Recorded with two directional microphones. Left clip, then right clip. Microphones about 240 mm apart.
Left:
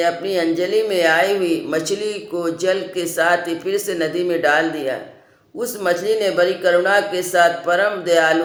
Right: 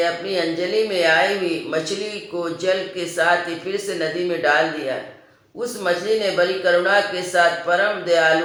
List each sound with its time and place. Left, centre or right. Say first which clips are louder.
0.0 s speech: left 2 dB; left
2.4 s speech: left 1 dB; left